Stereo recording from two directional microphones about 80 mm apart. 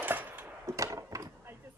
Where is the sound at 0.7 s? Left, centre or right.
Right.